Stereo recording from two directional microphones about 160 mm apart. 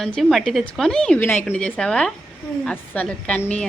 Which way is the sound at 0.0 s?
Centre (ahead or behind).